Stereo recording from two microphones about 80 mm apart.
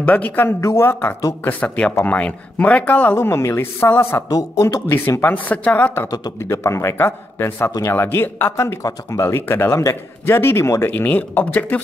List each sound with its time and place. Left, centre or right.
0.0 s speech: left
0.5 s a man's voice: left
1.4 s speech: left
3.2 s a man's voice: left
4.3 s speech: left
4.8 s speech: left
5.3 s speech: centre
6.0 s speech: left
6.4 s a man's voice: left
10.9 s speech: left